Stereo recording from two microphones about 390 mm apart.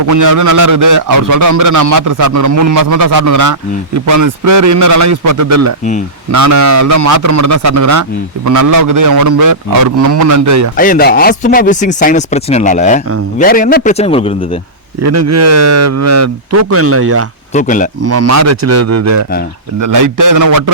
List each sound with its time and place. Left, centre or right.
0.1 s a man's voice: right
10.8 s a man's voice: left
15.0 s speech: right
17.5 s speech: centre
18.0 s a man's voice: right